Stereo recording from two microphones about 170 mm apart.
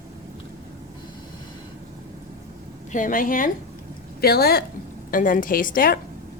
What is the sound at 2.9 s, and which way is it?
Speech, 50° left (ahead or behind).